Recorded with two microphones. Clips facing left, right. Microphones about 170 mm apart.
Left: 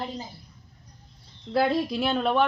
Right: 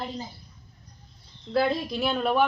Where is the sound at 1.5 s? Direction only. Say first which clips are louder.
Left 1 dB; 5° left (ahead or behind).